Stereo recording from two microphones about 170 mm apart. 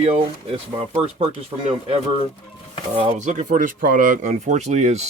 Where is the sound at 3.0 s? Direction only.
40° right (ahead or behind).